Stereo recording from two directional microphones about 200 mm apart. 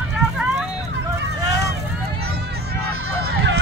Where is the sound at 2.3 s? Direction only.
55° right (ahead or behind).